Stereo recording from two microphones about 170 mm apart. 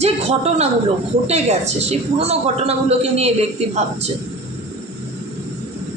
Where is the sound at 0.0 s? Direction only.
40° right (ahead or behind).